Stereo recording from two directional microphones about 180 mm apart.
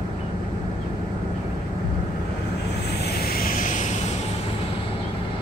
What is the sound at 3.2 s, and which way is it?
Vehicle, 55° left (ahead or behind).